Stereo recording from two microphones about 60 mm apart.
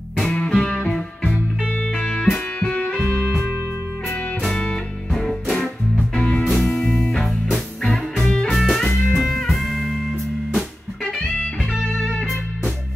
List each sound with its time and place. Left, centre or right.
0.3 s music: centre
4.4 s music: centre
6.1 s music: centre
6.5 s music: centre